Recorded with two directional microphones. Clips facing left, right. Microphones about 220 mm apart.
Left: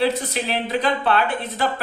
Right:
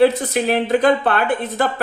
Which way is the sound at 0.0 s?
50° right (ahead or behind).